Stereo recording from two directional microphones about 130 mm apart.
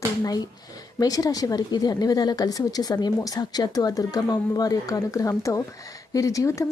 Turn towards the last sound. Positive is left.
turn(degrees=25)  # may be behind; listen again after turning